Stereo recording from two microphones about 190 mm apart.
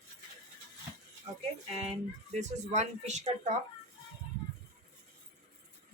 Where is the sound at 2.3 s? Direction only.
35° right (ahead or behind).